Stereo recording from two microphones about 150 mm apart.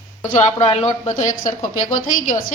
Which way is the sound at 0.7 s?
40° left (ahead or behind).